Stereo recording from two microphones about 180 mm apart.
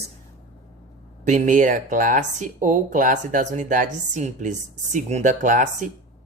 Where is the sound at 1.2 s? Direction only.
45° right (ahead or behind).